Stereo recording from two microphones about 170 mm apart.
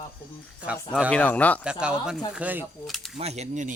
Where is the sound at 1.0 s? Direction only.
10° left (ahead or behind).